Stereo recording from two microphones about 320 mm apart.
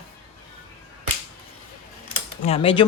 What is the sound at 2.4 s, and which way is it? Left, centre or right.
Speech, centre.